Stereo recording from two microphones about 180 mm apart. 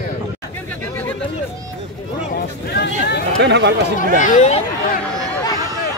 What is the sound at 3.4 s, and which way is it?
Speech, 70° right (ahead or behind).